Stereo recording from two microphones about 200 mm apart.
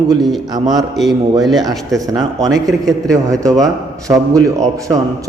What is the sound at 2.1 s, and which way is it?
Speech, 15° right (ahead or behind).